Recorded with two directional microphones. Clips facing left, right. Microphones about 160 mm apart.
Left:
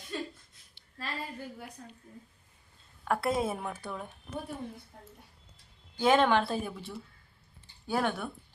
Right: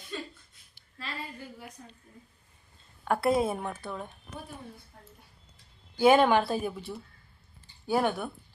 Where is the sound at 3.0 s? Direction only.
Centre (ahead or behind).